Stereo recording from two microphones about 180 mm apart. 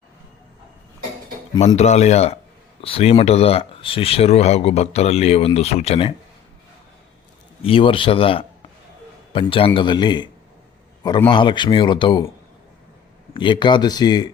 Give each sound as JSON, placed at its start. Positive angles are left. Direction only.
{"t": 1.5, "sound": "speech", "side_deg": 40}
{"t": 7.6, "sound": "speech", "side_deg": 30}
{"t": 11.3, "sound": "speech", "side_deg": 25}
{"t": 13.3, "sound": "speech", "side_deg": 25}